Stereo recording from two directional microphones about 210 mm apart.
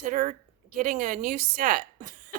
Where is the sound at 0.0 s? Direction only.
40° right (ahead or behind).